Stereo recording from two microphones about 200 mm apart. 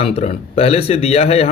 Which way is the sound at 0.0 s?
30° left (ahead or behind).